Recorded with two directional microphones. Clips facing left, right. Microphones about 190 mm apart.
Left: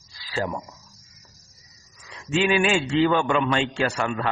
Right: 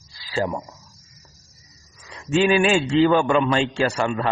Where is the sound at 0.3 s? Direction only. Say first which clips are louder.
Right 3 dB; 30° right (ahead or behind).